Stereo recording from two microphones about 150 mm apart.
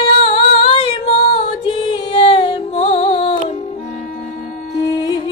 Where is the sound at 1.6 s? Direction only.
40° left (ahead or behind).